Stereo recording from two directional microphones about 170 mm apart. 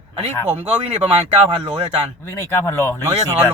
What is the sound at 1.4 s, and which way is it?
Speech, 35° right (ahead or behind).